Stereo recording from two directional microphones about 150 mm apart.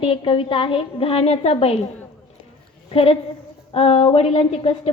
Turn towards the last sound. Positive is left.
turn(degrees=40)  # may be behind; listen again after turning